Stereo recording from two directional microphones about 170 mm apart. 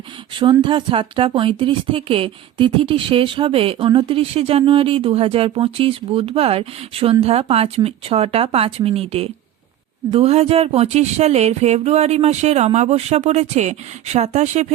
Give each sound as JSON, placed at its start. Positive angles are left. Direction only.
{"t": 0.6, "sound": "speech", "side_deg": -30}